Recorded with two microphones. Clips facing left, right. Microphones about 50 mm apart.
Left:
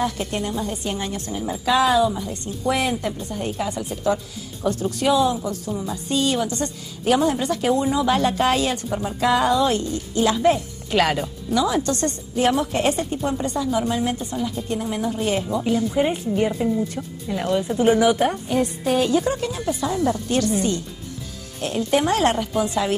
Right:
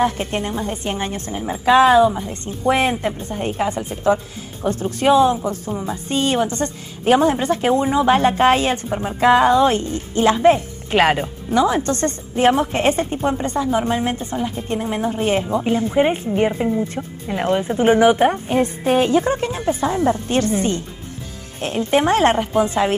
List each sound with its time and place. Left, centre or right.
0.0 s a woman's voice: right